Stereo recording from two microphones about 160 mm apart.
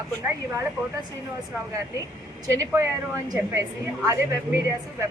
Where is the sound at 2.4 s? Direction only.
20° right (ahead or behind).